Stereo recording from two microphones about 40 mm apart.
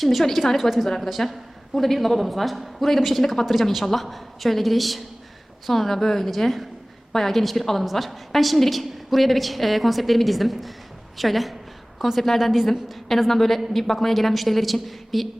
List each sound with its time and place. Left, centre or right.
0.0 s a woman's voice: centre